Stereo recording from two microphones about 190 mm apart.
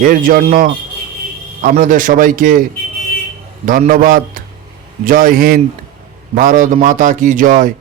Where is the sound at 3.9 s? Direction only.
50° right (ahead or behind).